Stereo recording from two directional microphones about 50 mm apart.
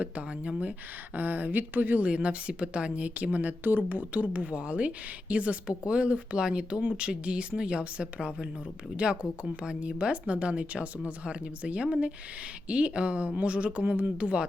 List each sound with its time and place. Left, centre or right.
0.0 s a woman's voice: right
2.0 s a woman's voice: right
3.6 s a woman's voice: right